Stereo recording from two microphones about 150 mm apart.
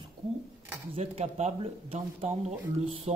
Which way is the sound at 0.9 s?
45° right (ahead or behind).